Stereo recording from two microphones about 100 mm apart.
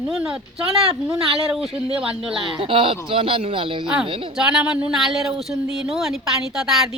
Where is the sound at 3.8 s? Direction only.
10° right (ahead or behind).